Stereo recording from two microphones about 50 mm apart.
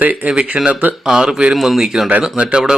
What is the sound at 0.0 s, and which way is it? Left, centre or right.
Speech, right.